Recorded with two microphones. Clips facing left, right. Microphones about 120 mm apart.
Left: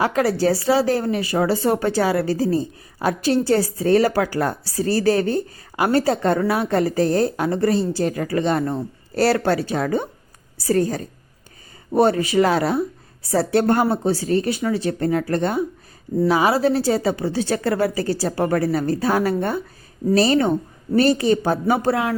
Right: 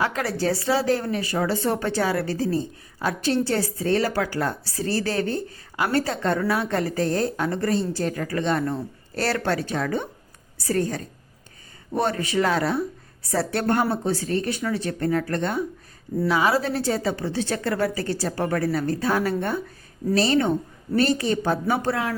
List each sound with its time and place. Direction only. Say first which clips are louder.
0.0 s a woman's voice: left 6 dB; 35° left (ahead or behind)
12.3 s a woman's voice: left 4 dB; 30° left (ahead or behind)